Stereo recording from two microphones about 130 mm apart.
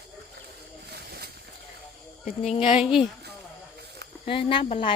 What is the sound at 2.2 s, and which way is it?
Speech, 60° left (ahead or behind).